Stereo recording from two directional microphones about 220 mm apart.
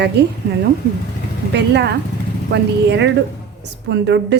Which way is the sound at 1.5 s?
50° right (ahead or behind).